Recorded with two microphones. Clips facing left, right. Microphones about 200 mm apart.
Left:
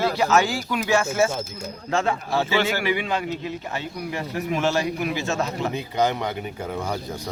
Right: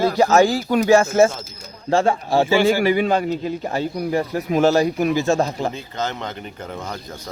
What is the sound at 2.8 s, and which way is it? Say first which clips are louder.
A man's voice: right 7 dB; 40° right (ahead or behind).